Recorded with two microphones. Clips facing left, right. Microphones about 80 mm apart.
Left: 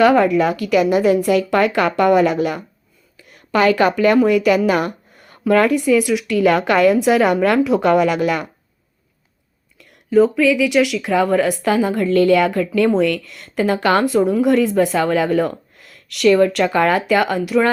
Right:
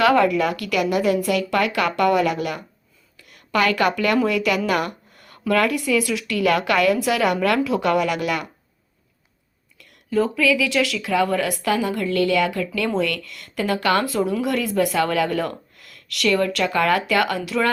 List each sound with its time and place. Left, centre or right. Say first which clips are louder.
0.0 s a woman's voice: left 4 dB; left
10.1 s a woman's voice: left 6 dB; left
13.1 s speech: left 7 dB; right
13.4 s a woman's voice: left 4 dB; left
16.9 s a woman's voice: left 3 dB; left